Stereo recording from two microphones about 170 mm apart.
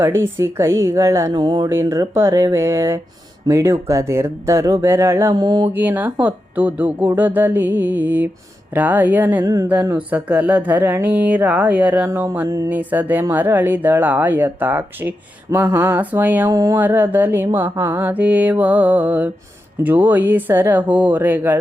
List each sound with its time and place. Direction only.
0.0 s speech: 15° right (ahead or behind)
5.7 s speech: 10° right (ahead or behind)